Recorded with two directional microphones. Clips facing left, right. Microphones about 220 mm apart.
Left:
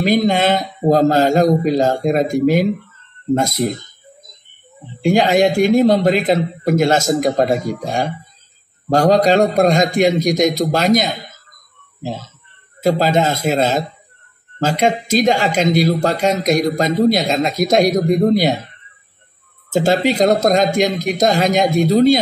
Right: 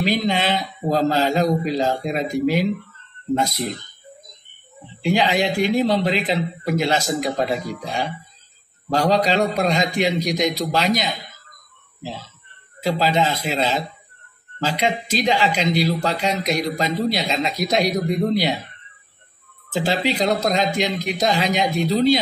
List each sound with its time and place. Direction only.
0.0 s speech: 45° left (ahead or behind)
4.8 s speech: 45° left (ahead or behind)
19.7 s speech: 45° left (ahead or behind)